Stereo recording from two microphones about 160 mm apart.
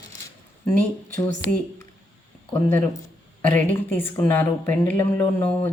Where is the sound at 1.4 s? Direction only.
90° left.